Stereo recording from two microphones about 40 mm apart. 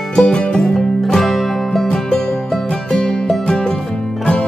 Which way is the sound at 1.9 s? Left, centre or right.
Left.